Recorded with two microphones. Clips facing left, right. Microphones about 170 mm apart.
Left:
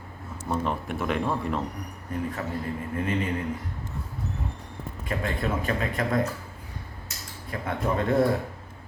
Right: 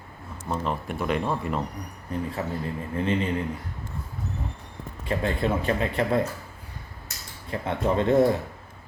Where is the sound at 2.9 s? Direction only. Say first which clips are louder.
Right 3 dB; 30° right (ahead or behind).